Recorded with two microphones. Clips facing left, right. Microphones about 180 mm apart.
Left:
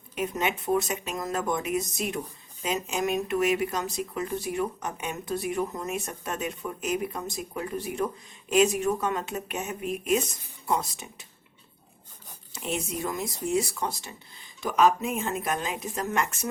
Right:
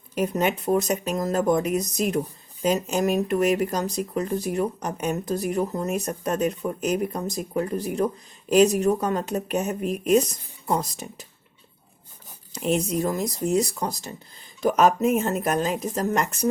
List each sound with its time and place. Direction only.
0.1 s speech: 40° right (ahead or behind)
12.5 s speech: 40° right (ahead or behind)